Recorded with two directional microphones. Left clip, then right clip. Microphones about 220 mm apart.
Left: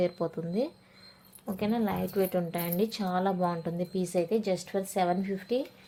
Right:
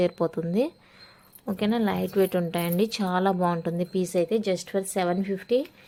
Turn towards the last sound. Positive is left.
turn(degrees=-30)  # may be behind; listen again after turning